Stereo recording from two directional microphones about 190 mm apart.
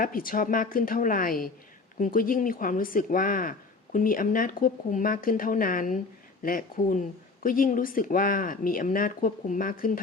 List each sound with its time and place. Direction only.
0.0 s speech: 50° left (ahead or behind)